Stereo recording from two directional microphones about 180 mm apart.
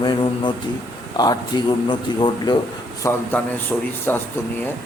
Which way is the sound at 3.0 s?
15° left (ahead or behind).